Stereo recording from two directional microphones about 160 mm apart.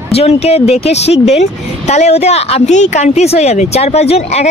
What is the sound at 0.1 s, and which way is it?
Speech, 40° left (ahead or behind).